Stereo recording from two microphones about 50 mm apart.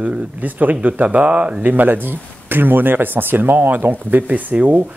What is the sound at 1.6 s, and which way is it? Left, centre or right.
Speech, right.